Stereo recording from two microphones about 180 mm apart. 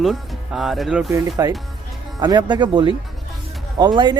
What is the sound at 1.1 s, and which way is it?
Speech, 20° right (ahead or behind).